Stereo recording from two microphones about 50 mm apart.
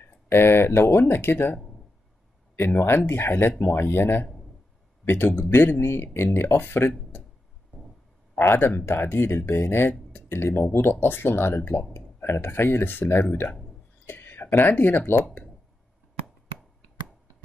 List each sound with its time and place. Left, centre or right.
0.0 s speech: left
8.4 s speech: left
14.0 s a sound: left
14.7 s speech: left